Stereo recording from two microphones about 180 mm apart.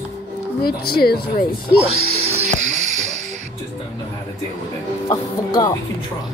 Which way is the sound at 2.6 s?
40° right (ahead or behind).